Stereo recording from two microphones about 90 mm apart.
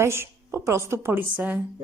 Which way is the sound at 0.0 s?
30° right (ahead or behind).